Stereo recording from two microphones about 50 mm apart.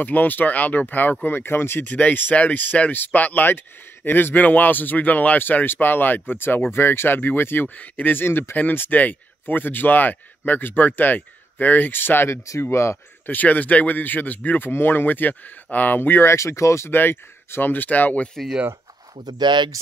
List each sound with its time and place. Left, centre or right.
0.0 s speech: left
1.9 s speech: left
7.6 s speech: left
7.9 s speech: left
8.3 s speech: left
8.5 s speech: left
12.3 s speech: left
13.3 s speech: left
14.7 s speech: left
16.3 s speech: left
16.9 s speech: left